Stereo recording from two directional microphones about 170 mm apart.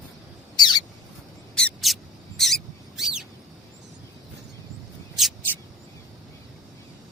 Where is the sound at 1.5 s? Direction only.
Centre (ahead or behind).